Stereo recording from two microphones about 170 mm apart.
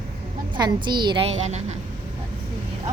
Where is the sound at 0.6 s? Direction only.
25° right (ahead or behind).